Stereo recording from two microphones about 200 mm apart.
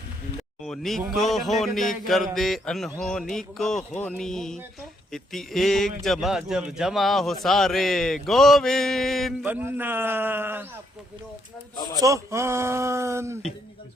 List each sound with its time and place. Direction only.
0.6 s speech: centre (ahead or behind)
9.4 s speech: 10° right (ahead or behind)
11.9 s speech: 15° right (ahead or behind)